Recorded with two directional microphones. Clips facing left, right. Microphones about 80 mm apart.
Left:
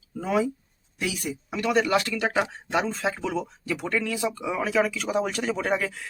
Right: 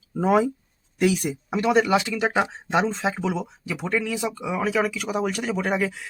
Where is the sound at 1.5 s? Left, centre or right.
Right.